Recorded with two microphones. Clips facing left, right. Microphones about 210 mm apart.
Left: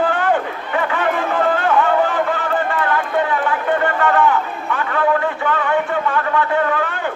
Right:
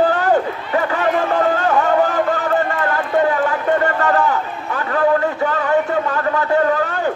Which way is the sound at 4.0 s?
40° right (ahead or behind).